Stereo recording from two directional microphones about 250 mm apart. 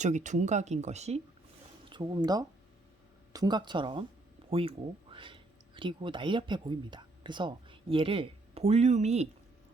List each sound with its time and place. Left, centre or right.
0.0 s speech: right